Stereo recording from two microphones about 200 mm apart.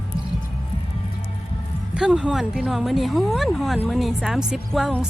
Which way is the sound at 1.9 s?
5° right (ahead or behind).